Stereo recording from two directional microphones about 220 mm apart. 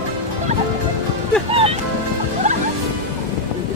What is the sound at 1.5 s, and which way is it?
Music, 25° right (ahead or behind).